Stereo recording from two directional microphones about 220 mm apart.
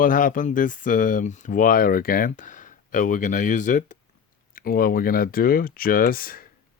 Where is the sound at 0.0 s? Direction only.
40° left (ahead or behind).